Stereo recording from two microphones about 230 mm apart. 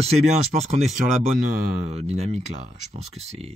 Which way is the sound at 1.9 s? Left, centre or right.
Right.